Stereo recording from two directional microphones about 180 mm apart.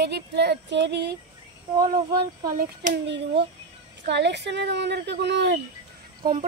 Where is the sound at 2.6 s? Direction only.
45° right (ahead or behind).